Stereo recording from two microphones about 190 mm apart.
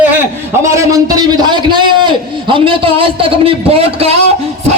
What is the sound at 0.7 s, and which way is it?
A man's voice, 15° right (ahead or behind).